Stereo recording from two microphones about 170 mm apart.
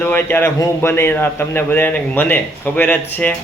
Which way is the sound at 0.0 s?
10° left (ahead or behind).